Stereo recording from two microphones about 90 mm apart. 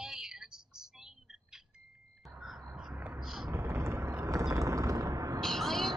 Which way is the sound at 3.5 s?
30° right (ahead or behind).